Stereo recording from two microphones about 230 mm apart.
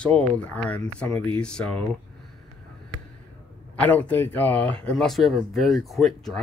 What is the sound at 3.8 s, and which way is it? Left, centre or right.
Speech, centre.